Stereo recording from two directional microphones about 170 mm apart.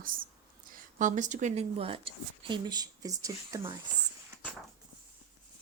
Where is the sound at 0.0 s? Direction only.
55° right (ahead or behind).